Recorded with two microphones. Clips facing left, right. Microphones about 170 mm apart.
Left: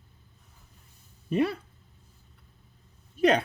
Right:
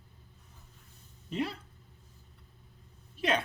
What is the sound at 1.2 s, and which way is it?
Speech, 60° left (ahead or behind).